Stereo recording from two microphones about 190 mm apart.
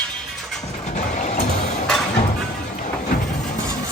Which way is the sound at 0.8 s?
40° left (ahead or behind).